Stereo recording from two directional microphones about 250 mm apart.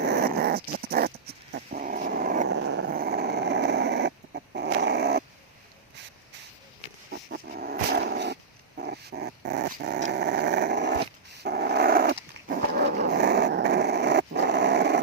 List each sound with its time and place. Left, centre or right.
0.2 s dog: right
2.6 s dog: right
7.1 s dog: right